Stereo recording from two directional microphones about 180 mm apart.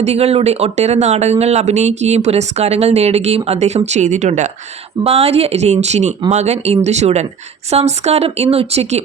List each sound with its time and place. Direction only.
0.0 s speech: 35° right (ahead or behind)